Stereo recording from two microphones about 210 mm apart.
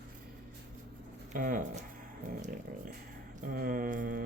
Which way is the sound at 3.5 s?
45° right (ahead or behind).